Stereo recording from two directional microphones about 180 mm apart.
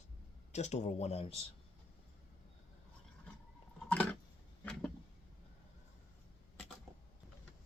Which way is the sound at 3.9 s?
10° left (ahead or behind).